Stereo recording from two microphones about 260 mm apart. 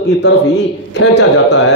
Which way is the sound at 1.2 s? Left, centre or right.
Left.